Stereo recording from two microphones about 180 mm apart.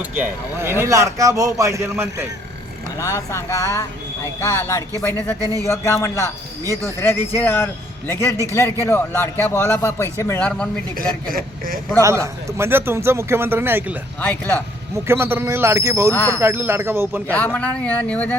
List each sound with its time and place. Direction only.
0.1 s speech: 10° right (ahead or behind)
3.0 s a man's voice: 15° left (ahead or behind)
11.3 s speech: 50° right (ahead or behind)
11.9 s speech: 15° right (ahead or behind)
14.2 s a man's voice: 10° left (ahead or behind)
15.0 s speech: 15° right (ahead or behind)
16.1 s a man's voice: 15° left (ahead or behind)
16.4 s speech: 10° right (ahead or behind)
17.3 s a man's voice: 10° left (ahead or behind)